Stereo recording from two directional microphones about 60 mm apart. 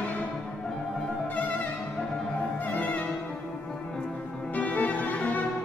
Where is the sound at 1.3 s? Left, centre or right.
Left.